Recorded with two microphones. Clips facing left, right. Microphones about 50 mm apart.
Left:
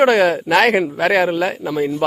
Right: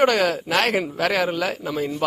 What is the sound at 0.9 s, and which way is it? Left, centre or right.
Speech, left.